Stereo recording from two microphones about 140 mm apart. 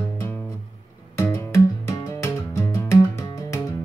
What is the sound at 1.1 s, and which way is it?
Music, 20° left (ahead or behind).